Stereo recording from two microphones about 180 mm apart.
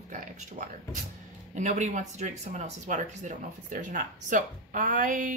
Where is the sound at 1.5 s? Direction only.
40° right (ahead or behind).